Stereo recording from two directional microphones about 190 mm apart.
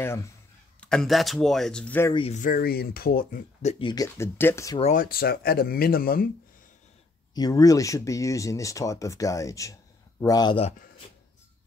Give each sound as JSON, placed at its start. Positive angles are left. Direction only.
{"t": 0.0, "sound": "speech", "side_deg": 15}
{"t": 2.1, "sound": "speech", "side_deg": 35}
{"t": 3.8, "sound": "speech", "side_deg": 20}
{"t": 4.9, "sound": "speech", "side_deg": 50}
{"t": 7.3, "sound": "speech", "side_deg": 20}